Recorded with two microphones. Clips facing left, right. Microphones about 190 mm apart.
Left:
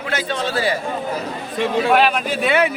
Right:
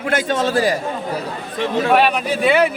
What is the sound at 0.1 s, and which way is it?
Speech, 50° right (ahead or behind).